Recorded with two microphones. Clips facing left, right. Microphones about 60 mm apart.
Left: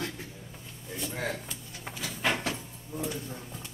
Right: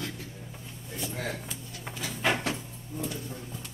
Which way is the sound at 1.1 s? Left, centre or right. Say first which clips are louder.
Left 2 dB; centre.